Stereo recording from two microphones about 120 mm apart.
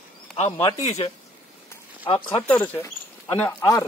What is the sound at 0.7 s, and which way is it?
Speech, 85° left.